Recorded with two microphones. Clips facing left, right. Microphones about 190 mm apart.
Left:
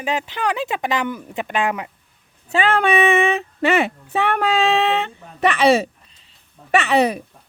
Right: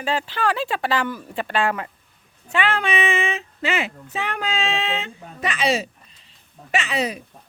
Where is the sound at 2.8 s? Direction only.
60° left (ahead or behind).